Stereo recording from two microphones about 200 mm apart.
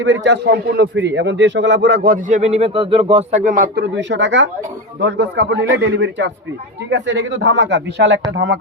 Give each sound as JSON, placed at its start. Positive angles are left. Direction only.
{"t": 0.0, "sound": "a man's voice", "side_deg": -65}
{"t": 3.9, "sound": "a man's voice", "side_deg": -65}